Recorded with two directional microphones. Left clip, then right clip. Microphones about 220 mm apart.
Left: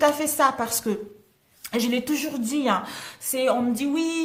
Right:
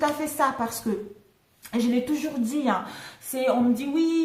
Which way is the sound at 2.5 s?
45° left (ahead or behind).